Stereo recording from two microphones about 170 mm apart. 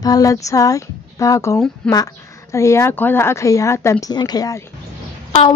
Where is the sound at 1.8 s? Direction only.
5° left (ahead or behind).